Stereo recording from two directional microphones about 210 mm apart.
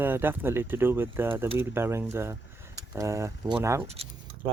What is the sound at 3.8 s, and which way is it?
Speech, 30° right (ahead or behind).